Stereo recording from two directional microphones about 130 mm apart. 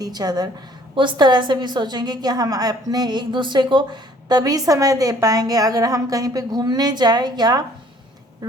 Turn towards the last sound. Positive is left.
turn(degrees=-30)  # may be behind; listen again after turning